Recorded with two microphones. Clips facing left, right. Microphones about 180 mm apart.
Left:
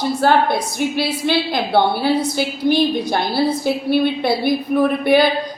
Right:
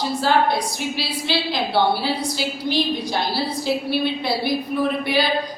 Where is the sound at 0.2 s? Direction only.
55° left (ahead or behind).